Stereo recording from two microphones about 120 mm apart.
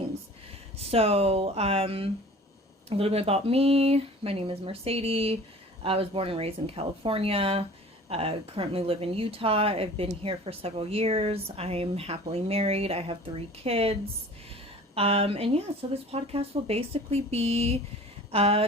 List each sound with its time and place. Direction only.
0.8 s speech: 55° right (ahead or behind)
14.9 s speech: 55° right (ahead or behind)
18.3 s a sound: 55° right (ahead or behind)